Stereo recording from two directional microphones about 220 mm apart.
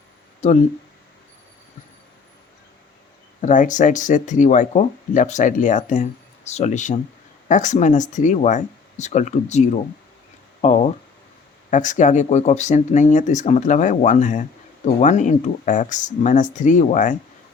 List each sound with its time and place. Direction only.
3.4 s speech: 35° left (ahead or behind)